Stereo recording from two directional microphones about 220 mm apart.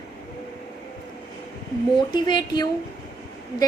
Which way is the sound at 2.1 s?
20° left (ahead or behind).